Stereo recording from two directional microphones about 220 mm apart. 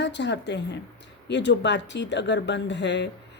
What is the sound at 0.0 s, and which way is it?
Speech, 50° left (ahead or behind).